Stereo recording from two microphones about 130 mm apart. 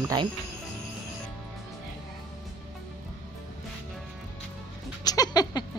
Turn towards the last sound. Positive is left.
turn(degrees=30)  # may be behind; listen again after turning